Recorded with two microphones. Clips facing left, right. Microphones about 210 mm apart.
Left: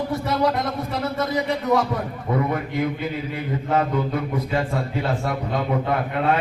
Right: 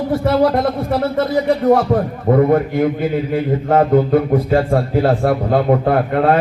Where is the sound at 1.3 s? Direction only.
50° right (ahead or behind).